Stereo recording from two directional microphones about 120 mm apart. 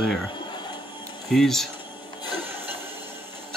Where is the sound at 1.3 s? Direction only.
5° left (ahead or behind).